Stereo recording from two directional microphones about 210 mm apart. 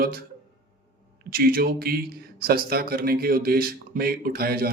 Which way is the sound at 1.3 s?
45° right (ahead or behind).